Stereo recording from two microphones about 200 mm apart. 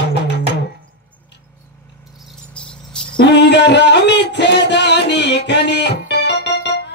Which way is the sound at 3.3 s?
60° left (ahead or behind).